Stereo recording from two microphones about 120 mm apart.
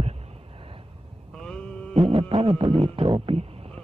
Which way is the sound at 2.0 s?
55° right (ahead or behind).